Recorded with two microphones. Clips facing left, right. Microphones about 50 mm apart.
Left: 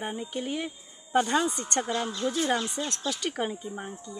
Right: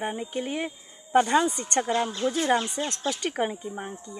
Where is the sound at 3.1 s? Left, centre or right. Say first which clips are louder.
Right 3 dB; centre.